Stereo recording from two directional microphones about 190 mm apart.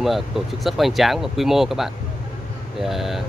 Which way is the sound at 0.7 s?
Centre (ahead or behind).